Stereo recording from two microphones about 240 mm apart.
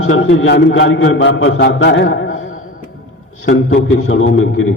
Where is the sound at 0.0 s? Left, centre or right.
Left.